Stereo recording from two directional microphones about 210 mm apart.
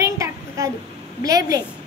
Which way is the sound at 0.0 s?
15° right (ahead or behind).